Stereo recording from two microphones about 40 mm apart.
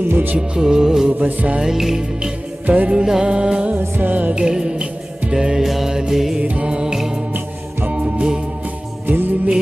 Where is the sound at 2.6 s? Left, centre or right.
Right.